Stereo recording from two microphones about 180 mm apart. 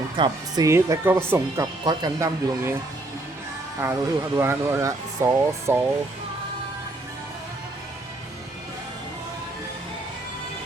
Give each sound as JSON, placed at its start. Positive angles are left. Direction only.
{"t": 0.2, "sound": "speech", "side_deg": -20}
{"t": 1.8, "sound": "speech", "side_deg": -20}
{"t": 3.8, "sound": "speech", "side_deg": -15}